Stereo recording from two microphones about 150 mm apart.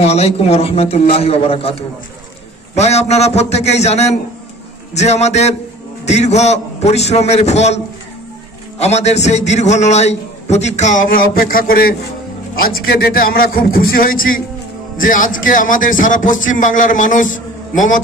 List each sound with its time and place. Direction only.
0.0 s a man's voice: 45° left (ahead or behind); by 18.0 s 60° left (ahead or behind)